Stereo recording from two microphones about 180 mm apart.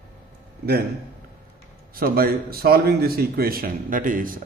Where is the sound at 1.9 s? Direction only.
55° right (ahead or behind).